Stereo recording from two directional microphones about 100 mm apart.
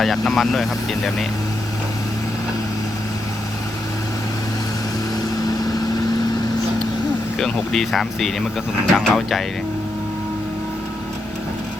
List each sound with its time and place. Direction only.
0.0 s speech: centre (ahead or behind)
7.3 s speech: 5° left (ahead or behind)